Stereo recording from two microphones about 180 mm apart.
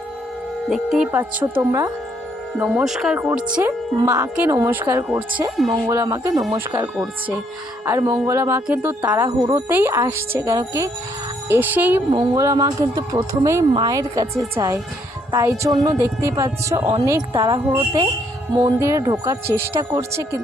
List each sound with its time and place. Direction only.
0.7 s speech: 5° right (ahead or behind)
1.5 s speech: 20° right (ahead or behind)
2.6 s speech: 5° right (ahead or behind)
6.9 s speech: centre (ahead or behind)
7.9 s speech: 20° right (ahead or behind)
9.4 s speech: 25° right (ahead or behind)
9.6 s speech: 10° right (ahead or behind)